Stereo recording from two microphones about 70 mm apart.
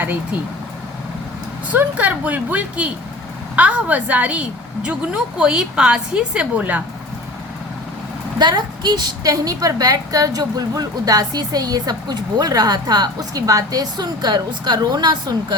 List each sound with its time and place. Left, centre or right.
1.7 s a woman's voice: right
8.4 s a woman's voice: right
9.3 s a woman's voice: right